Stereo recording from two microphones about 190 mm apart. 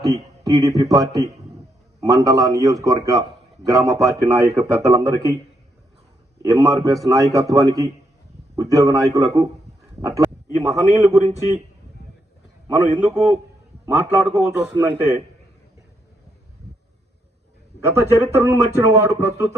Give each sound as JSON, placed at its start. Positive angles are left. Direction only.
{"t": 0.0, "sound": "a sound", "side_deg": -20}
{"t": 0.8, "sound": "a man's voice", "side_deg": -20}
{"t": 6.4, "sound": "a man's voice", "side_deg": -15}
{"t": 11.2, "sound": "speech", "side_deg": -35}
{"t": 12.6, "sound": "a man's voice", "side_deg": -15}
{"t": 14.3, "sound": "a man's voice", "side_deg": -10}
{"t": 17.8, "sound": "a man's voice", "side_deg": -15}